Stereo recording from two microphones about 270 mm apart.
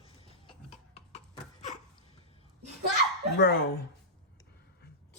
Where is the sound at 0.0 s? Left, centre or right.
Left.